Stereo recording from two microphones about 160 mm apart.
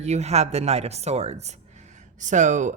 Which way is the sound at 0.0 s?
45° right (ahead or behind).